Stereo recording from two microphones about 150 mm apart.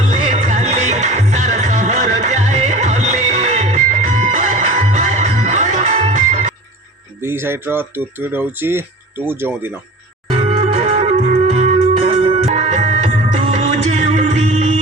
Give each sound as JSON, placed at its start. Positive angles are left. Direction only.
{"t": 0.1, "sound": "music", "side_deg": -50}
{"t": 7.2, "sound": "speech", "side_deg": -15}
{"t": 10.3, "sound": "music", "side_deg": -40}